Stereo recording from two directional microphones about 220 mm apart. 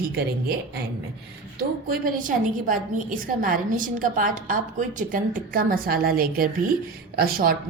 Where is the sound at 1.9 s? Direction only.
40° right (ahead or behind).